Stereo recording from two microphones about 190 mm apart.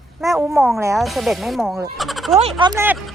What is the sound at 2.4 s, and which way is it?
Speech, 30° right (ahead or behind).